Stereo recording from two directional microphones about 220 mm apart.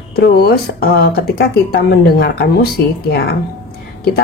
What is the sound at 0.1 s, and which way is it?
Speech, 45° left (ahead or behind).